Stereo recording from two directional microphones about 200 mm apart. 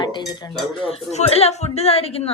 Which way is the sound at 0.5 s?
Centre (ahead or behind).